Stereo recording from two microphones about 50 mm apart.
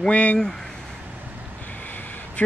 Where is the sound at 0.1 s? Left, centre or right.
Left.